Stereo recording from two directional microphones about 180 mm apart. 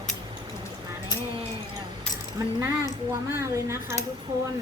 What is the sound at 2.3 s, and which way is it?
Speech, 15° right (ahead or behind).